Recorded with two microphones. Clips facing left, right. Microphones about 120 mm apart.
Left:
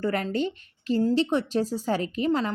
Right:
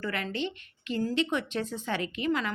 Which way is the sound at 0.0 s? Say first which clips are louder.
Left 6 dB; 40° left (ahead or behind).